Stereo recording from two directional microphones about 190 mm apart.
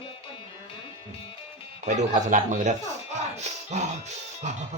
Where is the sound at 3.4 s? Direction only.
35° right (ahead or behind).